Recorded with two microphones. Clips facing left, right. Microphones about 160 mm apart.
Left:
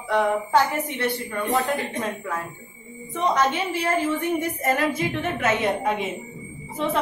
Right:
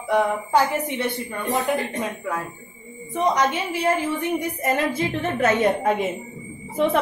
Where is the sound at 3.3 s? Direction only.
15° right (ahead or behind); by 5.5 s 30° right (ahead or behind).